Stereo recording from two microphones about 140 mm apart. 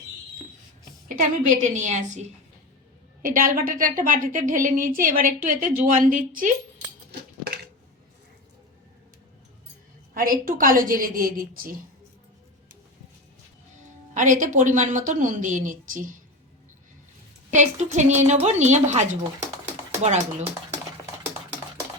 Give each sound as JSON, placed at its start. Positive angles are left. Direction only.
{"t": 1.0, "sound": "a woman's voice", "side_deg": -65}
{"t": 3.2, "sound": "a woman's voice", "side_deg": -80}
{"t": 10.2, "sound": "a woman's voice", "side_deg": -90}
{"t": 14.1, "sound": "a woman's voice", "side_deg": -65}
{"t": 17.5, "sound": "a woman's voice", "side_deg": -60}